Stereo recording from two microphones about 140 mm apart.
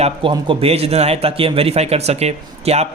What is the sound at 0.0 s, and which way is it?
A man's voice, 40° right (ahead or behind).